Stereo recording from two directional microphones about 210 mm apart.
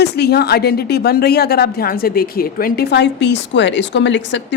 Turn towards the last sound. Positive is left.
turn(degrees=60)  # may be behind; listen again after turning